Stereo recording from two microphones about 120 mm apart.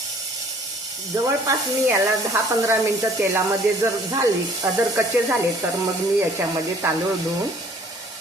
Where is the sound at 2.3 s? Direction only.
25° right (ahead or behind).